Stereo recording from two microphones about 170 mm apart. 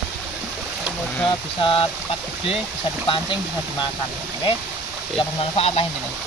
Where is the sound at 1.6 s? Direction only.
30° left (ahead or behind).